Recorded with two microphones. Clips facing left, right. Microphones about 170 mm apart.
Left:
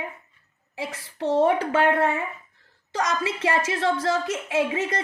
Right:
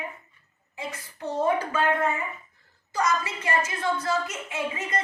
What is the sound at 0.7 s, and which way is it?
A woman's voice, 90° left.